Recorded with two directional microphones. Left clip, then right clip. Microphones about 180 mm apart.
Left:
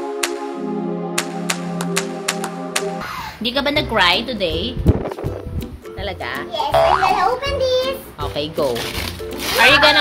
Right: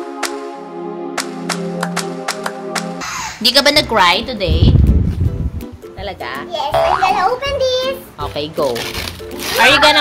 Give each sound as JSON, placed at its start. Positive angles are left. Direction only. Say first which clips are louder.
{"t": 3.4, "sound": "a child's voice", "louder": "right 8 dB", "side_deg": -15}
{"t": 6.5, "sound": "music", "louder": "even", "side_deg": -5}
{"t": 7.1, "sound": "a child's voice", "louder": "right 2 dB", "side_deg": -15}